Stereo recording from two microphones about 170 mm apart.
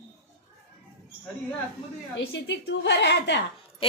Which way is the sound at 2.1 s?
90° left.